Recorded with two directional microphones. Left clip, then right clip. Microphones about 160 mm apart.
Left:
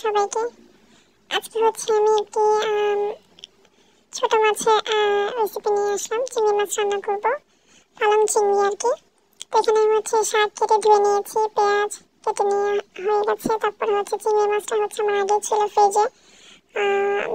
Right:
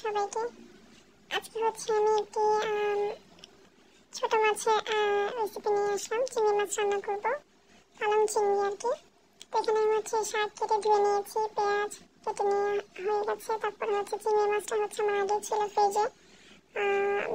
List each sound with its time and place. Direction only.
0.0 s speech: 35° left (ahead or behind)